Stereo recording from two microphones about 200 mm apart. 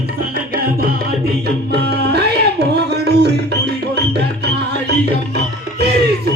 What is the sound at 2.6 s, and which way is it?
Music, 55° right (ahead or behind).